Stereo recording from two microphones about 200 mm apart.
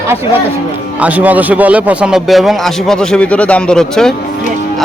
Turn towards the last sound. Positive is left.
turn(degrees=5)  # may be behind; listen again after turning